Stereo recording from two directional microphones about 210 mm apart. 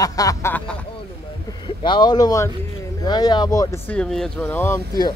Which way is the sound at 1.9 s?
20° left (ahead or behind).